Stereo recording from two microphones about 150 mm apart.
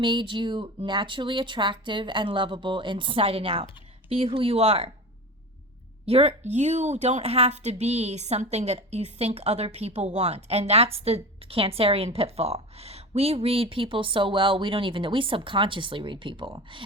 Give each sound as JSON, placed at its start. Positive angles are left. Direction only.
{"t": 0.0, "sound": "speech", "side_deg": -30}
{"t": 6.1, "sound": "a woman's voice", "side_deg": -45}